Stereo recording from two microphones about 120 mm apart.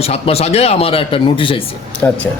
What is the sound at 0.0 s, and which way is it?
Speech, 55° left (ahead or behind).